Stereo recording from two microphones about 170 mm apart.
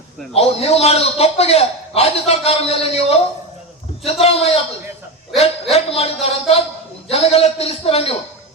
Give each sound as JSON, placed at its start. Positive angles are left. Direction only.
{"t": 0.3, "sound": "a man's voice", "side_deg": 35}